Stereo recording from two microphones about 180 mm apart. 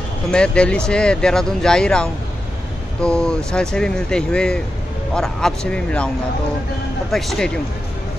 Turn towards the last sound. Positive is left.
turn(degrees=0)  # may be behind; listen again after turning